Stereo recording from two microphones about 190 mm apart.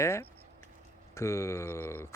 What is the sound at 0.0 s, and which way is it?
Speech, 15° left (ahead or behind).